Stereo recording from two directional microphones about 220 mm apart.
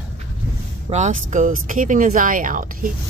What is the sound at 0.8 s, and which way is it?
Speech, 30° right (ahead or behind).